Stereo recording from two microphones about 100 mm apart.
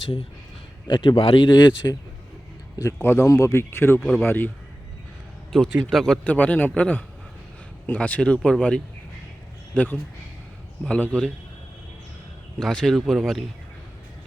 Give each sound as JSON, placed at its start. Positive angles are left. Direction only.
{"t": 0.9, "sound": "speech", "side_deg": 50}
{"t": 2.8, "sound": "speech", "side_deg": 25}
{"t": 5.5, "sound": "a man's voice", "side_deg": 5}
{"t": 6.2, "sound": "speech", "side_deg": 15}
{"t": 12.5, "sound": "speech", "side_deg": 5}